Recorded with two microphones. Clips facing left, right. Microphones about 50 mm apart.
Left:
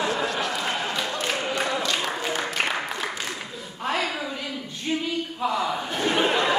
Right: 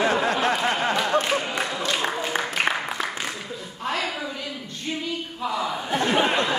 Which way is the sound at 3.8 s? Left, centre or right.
Centre.